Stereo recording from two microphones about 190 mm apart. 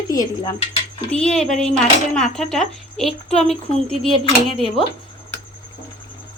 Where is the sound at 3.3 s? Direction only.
35° left (ahead or behind).